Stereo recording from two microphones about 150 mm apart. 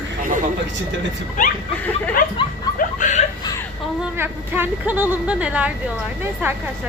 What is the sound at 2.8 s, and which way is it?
Chuckle, 55° left (ahead or behind).